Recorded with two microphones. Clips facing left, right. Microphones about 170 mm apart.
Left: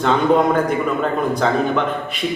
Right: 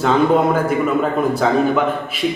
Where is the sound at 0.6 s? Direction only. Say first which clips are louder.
Right 2 dB; 5° right (ahead or behind).